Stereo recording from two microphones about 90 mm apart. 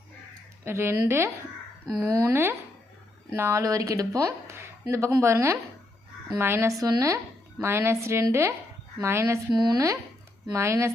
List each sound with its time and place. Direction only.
0.6 s a woman's voice: 30° right (ahead or behind)
3.6 s a woman's voice: 40° right (ahead or behind)
6.7 s speech: 40° right (ahead or behind)
7.6 s a woman's voice: 30° right (ahead or behind)
9.5 s speech: 50° right (ahead or behind); by 10.9 s 30° right (ahead or behind)